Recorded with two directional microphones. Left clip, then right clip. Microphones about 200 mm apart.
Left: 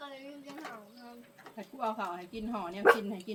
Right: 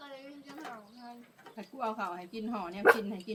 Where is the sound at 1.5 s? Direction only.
15° right (ahead or behind).